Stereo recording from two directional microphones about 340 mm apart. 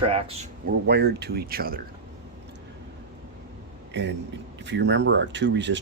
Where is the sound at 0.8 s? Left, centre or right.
Right.